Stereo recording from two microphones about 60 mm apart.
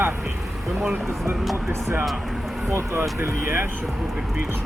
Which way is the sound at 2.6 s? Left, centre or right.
Right.